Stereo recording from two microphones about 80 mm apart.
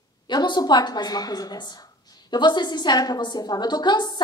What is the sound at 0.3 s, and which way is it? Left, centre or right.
A woman's voice, left.